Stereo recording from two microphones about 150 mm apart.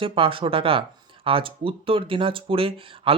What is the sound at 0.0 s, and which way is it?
Speech, 35° right (ahead or behind).